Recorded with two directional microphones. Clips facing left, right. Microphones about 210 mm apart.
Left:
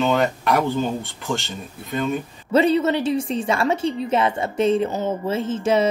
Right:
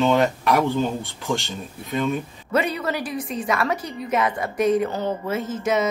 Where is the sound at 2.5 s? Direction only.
25° left (ahead or behind).